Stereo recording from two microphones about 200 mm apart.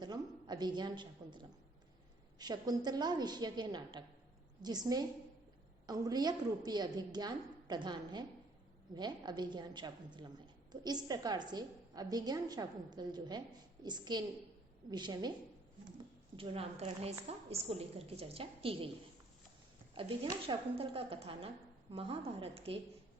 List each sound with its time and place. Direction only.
0.0 s a woman's voice: 20° right (ahead or behind)
16.3 s a woman's voice: 25° right (ahead or behind)
20.0 s a woman's voice: 25° right (ahead or behind)